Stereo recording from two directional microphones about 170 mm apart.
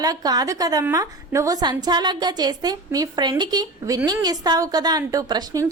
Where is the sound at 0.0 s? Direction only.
20° right (ahead or behind).